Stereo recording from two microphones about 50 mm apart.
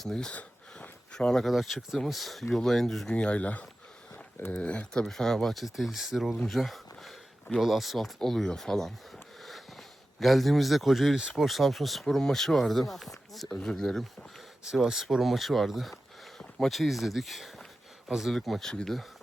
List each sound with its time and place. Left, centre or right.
0.0 s speech: centre
1.5 s speech: centre
3.1 s speech: left
5.0 s speech: centre
6.5 s a sound: centre
7.6 s speech: centre
9.1 s a sound: centre
11.4 s speech: centre
13.5 s speech: centre